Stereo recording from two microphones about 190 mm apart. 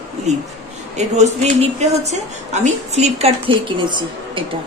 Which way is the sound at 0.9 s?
35° right (ahead or behind).